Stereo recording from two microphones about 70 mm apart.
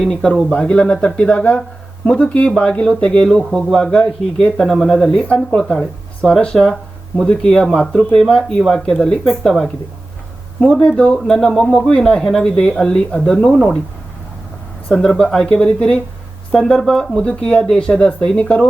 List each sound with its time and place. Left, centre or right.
0.0 s speech: centre
14.8 s speech: centre